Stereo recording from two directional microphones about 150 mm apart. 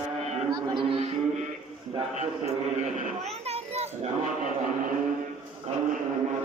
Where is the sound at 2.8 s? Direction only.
55° right (ahead or behind).